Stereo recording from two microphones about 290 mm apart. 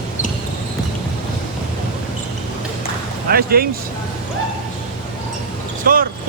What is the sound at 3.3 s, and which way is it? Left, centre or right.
Speech, right.